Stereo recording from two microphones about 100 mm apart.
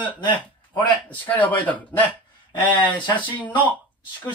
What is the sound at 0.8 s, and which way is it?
A man's voice, 15° left (ahead or behind).